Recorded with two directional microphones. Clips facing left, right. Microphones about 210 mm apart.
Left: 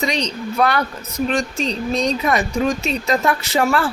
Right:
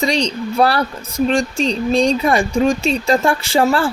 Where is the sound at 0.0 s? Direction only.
30° right (ahead or behind).